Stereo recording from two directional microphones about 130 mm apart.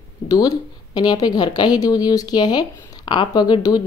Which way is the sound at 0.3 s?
30° left (ahead or behind).